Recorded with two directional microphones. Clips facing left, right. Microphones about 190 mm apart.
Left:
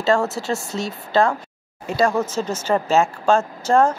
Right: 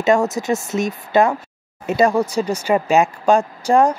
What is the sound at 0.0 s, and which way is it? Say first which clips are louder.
Speech: right 3 dB; 15° right (ahead or behind).